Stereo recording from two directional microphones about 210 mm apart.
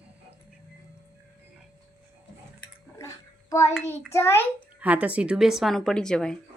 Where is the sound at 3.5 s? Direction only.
15° left (ahead or behind).